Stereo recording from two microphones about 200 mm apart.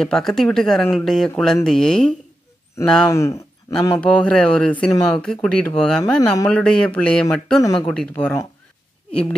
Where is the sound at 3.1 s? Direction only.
15° left (ahead or behind).